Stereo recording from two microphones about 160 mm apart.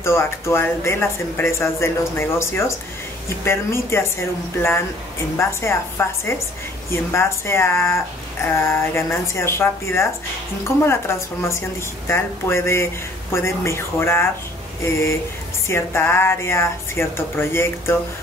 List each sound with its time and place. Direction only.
0.0 s speech: 15° left (ahead or behind)